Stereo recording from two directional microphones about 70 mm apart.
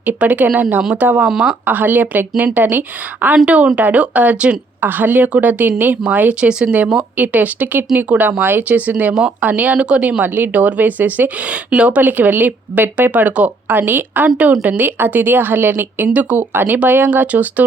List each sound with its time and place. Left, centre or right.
0.0 s speech: right